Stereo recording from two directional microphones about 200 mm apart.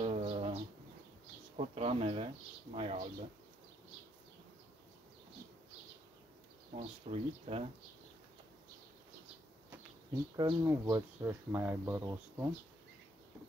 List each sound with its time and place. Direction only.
0.0 s a sound: 30° right (ahead or behind)
1.6 s speech: 30° right (ahead or behind)
6.7 s speech: 30° right (ahead or behind)
10.3 s speech: 15° right (ahead or behind)